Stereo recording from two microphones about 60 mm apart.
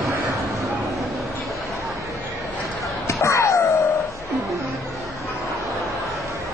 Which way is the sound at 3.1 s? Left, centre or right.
Left.